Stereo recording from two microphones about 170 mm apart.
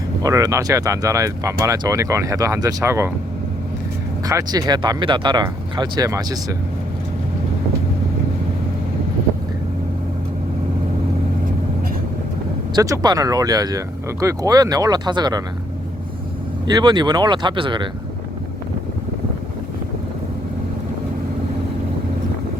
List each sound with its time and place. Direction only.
0.2 s speech: 20° right (ahead or behind)
4.3 s speech: 20° right (ahead or behind)
12.7 s speech: 20° right (ahead or behind)
16.6 s speech: 25° right (ahead or behind)